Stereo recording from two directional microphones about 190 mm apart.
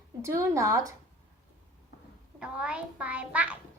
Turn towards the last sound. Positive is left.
turn(degrees=-5)  # may be behind; listen again after turning